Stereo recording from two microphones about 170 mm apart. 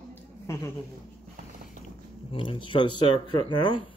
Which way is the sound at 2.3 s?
30° left (ahead or behind).